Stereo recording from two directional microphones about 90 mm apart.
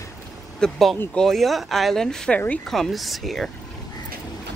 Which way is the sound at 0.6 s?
Centre (ahead or behind).